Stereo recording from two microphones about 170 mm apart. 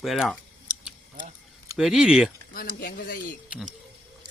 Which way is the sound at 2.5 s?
60° left (ahead or behind).